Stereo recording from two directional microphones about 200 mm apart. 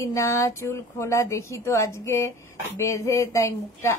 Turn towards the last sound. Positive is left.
turn(degrees=15)  # may be behind; listen again after turning